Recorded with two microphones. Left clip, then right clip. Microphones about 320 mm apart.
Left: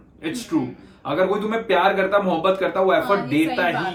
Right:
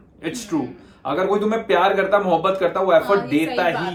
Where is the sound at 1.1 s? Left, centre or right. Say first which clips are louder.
Right 1 dB; centre.